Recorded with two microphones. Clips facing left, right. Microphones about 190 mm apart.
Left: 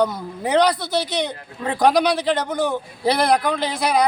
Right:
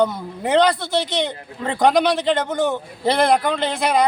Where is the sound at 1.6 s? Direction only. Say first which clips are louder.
Right 1 dB; 5° left (ahead or behind).